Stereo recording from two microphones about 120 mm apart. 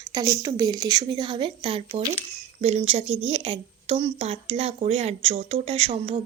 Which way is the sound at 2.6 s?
60° right (ahead or behind).